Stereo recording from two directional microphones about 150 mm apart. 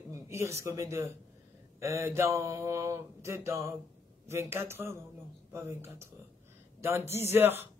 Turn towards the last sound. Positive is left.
turn(degrees=-15)  # may be behind; listen again after turning